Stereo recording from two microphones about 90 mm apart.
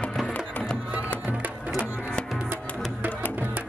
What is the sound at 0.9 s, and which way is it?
Music, 15° right (ahead or behind).